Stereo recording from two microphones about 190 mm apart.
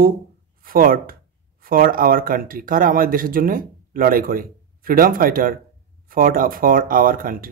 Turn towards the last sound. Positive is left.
turn(degrees=-50)  # may be behind; listen again after turning